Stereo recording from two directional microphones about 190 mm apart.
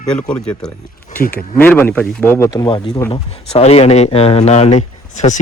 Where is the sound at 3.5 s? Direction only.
30° left (ahead or behind).